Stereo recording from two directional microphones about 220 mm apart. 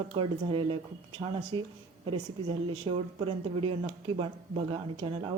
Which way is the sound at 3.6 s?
25° right (ahead or behind).